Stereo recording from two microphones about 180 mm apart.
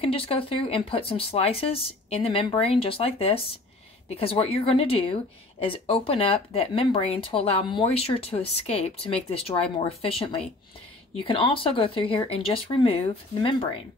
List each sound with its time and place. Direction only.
0.0 s speech: 30° left (ahead or behind)